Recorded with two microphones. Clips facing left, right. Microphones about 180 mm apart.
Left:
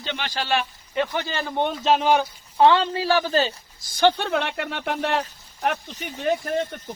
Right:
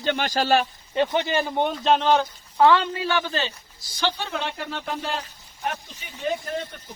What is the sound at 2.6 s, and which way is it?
A woman's voice, 30° left (ahead or behind).